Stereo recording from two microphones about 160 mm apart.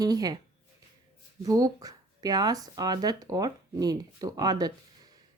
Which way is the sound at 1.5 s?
20° right (ahead or behind).